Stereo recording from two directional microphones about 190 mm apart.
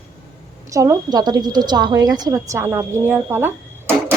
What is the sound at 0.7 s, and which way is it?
A woman's voice, 15° right (ahead or behind).